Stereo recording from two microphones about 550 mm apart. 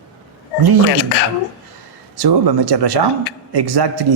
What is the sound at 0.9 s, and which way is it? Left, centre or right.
Speech, left.